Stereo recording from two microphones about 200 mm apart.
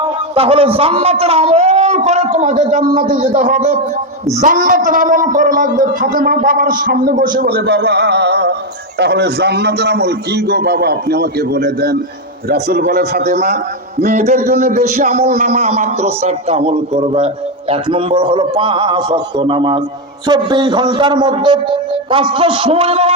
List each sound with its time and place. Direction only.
0.3 s a man's voice: 30° right (ahead or behind)